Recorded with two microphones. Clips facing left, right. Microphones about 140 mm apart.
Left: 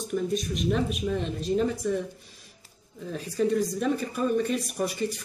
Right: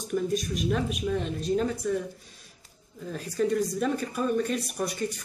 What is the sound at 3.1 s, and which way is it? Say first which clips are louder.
Speech: left 1 dB; centre (ahead or behind).